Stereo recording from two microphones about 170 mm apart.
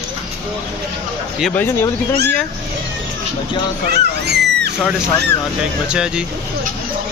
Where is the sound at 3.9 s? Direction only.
75° right (ahead or behind).